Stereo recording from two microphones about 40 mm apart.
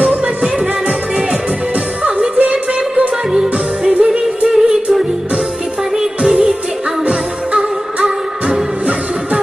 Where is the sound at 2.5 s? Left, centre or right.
Right.